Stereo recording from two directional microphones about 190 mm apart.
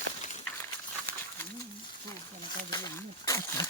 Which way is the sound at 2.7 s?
20° left (ahead or behind).